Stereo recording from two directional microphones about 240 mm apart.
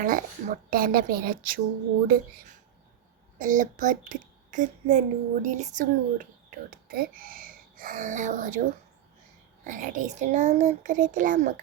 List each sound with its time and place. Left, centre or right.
0.0 s a child's voice: right
3.3 s a child's voice: right
9.6 s a child's voice: right